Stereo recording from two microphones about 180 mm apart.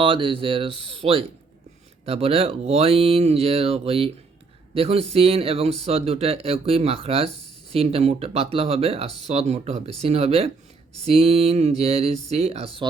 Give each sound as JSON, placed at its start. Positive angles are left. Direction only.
{"t": 0.0, "sound": "speech", "side_deg": -30}